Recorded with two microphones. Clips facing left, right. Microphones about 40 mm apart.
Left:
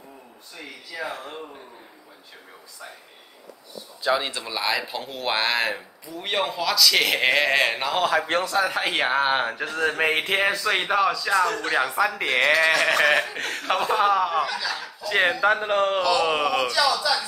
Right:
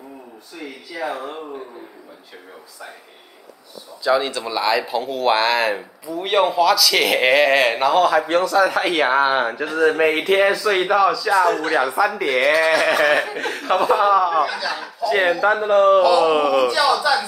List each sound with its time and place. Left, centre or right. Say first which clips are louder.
1.0 s speech: right 7 dB; centre
4.1 s speech: right 5 dB; centre
4.4 s a man's voice: right 6 dB; centre
15.6 s a man's voice: right 8 dB; centre
16.0 s speech: right 7 dB; centre
16.3 s a man's voice: right 6 dB; centre
17.1 s speech: right 6 dB; right